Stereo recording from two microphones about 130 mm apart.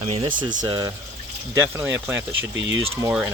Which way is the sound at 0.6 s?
30° right (ahead or behind).